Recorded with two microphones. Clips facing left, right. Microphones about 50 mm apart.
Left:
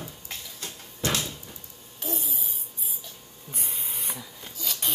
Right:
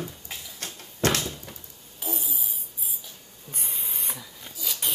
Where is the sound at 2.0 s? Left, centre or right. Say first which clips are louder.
Left 1 dB; centre.